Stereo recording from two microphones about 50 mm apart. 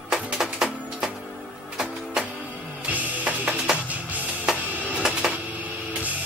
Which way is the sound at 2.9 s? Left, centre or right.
Right.